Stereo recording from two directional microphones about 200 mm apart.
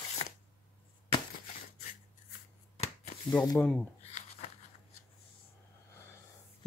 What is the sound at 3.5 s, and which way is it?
Speech, 5° left (ahead or behind).